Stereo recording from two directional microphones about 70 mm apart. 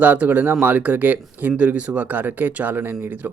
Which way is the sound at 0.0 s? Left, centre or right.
Right.